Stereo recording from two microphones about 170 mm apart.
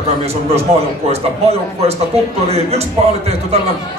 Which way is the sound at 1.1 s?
40° right (ahead or behind).